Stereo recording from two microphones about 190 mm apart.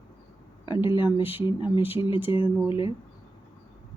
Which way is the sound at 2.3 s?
25° left (ahead or behind).